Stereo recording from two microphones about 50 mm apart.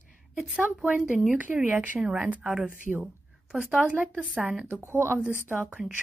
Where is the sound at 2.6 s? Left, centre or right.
Right.